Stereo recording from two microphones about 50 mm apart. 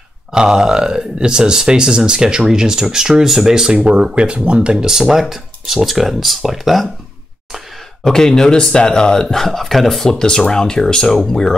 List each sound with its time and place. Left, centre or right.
0.3 s speech: centre
3.7 s speech: right; by 6.9 s centre
8.0 s speech: centre